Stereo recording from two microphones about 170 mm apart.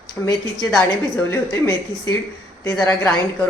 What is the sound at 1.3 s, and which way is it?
Speech, 15° left (ahead or behind).